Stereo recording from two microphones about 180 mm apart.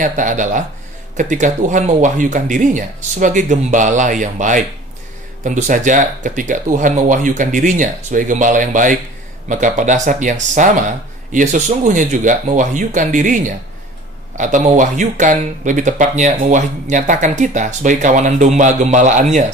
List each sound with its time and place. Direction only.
0.0 s speech: 45° right (ahead or behind)